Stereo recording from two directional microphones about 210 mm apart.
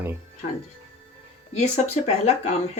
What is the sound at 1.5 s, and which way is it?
Speech, 30° left (ahead or behind).